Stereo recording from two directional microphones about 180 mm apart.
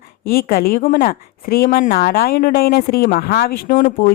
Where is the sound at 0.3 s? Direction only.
55° left (ahead or behind).